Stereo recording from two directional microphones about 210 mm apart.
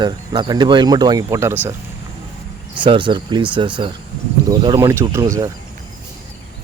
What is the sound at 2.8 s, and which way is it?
Speech, 25° right (ahead or behind).